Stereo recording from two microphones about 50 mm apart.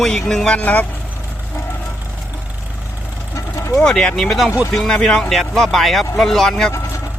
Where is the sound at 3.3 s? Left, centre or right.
Left.